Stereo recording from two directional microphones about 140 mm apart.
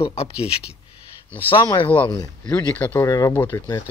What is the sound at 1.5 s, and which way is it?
Speech, 35° left (ahead or behind).